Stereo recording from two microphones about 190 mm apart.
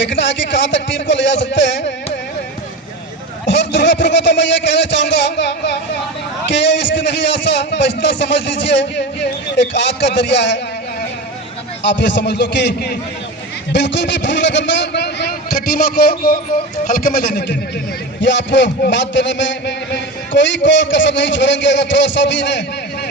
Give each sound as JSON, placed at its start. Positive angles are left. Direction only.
{"t": 0.0, "sound": "a man's voice", "side_deg": 70}
{"t": 3.4, "sound": "a man's voice", "side_deg": 70}
{"t": 11.8, "sound": "a man's voice", "side_deg": 65}
{"t": 18.2, "sound": "a man's voice", "side_deg": 70}